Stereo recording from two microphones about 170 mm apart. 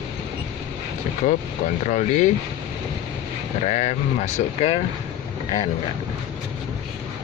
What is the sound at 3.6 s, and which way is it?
Speech, 40° left (ahead or behind).